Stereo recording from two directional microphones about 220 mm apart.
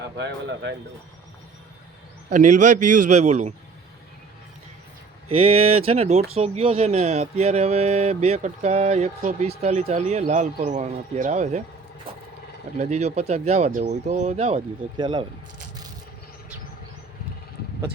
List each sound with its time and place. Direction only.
0.2 s speech: 55° right (ahead or behind)
2.3 s speech: 35° right (ahead or behind)
5.4 s speech: 25° right (ahead or behind)
12.7 s speech: 30° right (ahead or behind)